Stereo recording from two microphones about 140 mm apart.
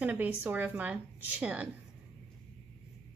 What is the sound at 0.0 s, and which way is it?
A woman's voice, 10° right (ahead or behind).